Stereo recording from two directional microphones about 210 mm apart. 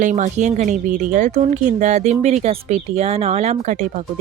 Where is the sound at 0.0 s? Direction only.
35° right (ahead or behind).